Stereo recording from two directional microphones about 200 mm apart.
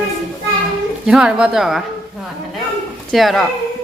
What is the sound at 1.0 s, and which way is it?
Speech, 5° right (ahead or behind).